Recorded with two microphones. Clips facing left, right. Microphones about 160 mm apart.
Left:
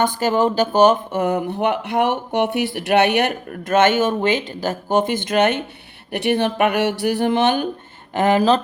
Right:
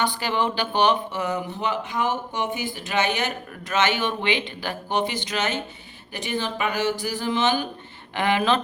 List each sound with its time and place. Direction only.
0.0 s speech: 45° left (ahead or behind)
8.1 s speech: 40° left (ahead or behind)